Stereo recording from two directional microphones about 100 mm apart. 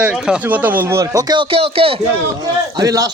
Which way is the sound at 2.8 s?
35° right (ahead or behind).